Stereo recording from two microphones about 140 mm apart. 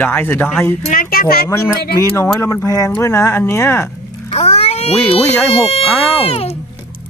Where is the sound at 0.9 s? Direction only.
90° left.